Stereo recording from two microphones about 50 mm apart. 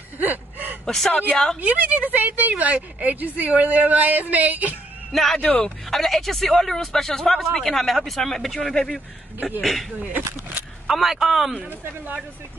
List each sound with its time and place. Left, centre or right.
0.2 s a sound: right
0.8 s speech: centre
1.6 s a woman's voice: right
5.1 s speech: centre
10.9 s speech: centre